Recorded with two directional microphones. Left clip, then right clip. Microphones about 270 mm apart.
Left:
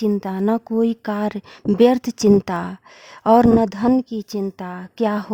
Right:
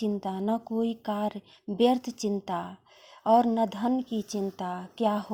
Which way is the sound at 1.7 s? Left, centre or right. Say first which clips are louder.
Left 10 dB; left.